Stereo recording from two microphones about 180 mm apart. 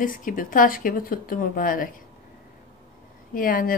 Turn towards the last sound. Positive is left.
turn(degrees=50)  # may be behind; listen again after turning